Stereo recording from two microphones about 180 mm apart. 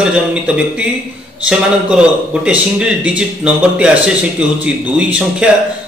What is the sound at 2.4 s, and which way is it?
Speech, 5° right (ahead or behind).